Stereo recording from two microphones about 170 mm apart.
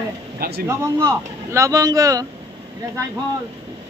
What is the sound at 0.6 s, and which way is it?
Speech, 15° right (ahead or behind).